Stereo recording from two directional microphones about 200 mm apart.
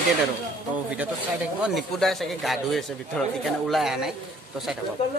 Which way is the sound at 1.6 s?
Centre (ahead or behind).